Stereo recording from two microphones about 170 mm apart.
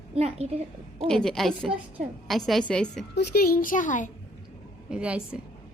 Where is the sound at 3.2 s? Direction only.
65° left (ahead or behind); by 4.1 s 50° left (ahead or behind).